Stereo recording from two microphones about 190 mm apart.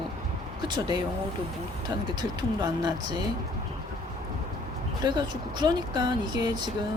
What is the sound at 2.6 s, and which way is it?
Speech, 20° right (ahead or behind).